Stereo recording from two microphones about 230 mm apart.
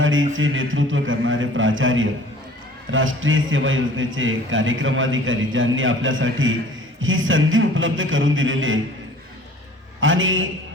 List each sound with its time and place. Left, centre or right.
0.0 s a man's voice: right
10.0 s a man's voice: right